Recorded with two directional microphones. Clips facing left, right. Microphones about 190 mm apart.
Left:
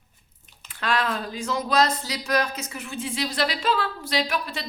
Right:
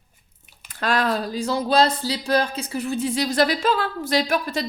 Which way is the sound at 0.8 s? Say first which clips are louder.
Right 4 dB; 40° right (ahead or behind).